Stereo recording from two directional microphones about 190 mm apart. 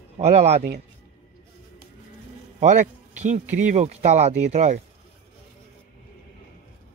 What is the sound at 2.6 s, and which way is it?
Speech, 40° right (ahead or behind).